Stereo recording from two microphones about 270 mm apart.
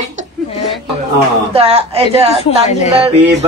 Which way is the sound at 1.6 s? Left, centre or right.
Right.